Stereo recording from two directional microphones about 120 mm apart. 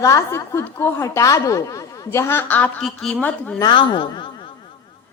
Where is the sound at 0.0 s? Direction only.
25° left (ahead or behind); by 3.6 s 10° left (ahead or behind).